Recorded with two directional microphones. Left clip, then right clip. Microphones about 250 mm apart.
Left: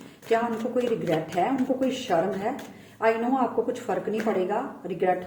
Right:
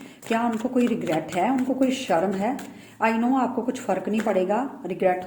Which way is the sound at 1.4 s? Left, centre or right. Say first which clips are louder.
Right 3 dB; right.